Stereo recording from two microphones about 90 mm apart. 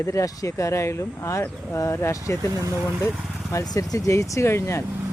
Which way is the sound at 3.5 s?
40° left (ahead or behind).